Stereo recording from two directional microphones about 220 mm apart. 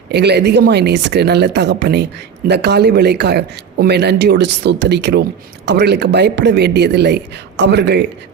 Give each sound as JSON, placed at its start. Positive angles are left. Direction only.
{"t": 0.1, "sound": "speech", "side_deg": -50}